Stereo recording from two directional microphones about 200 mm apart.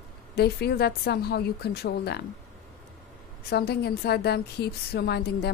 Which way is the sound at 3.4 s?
55° left (ahead or behind).